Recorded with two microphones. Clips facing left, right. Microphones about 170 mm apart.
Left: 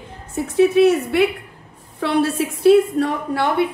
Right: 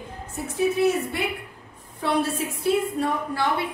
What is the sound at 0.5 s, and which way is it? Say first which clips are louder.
A woman's voice: left 8 dB; 85° left.